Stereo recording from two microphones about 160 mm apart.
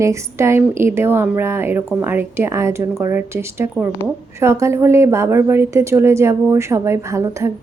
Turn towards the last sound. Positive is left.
turn(degrees=-20)  # may be behind; listen again after turning